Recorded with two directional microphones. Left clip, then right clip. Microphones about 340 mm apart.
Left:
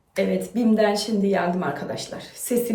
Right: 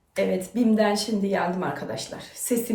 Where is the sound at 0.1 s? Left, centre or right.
Centre.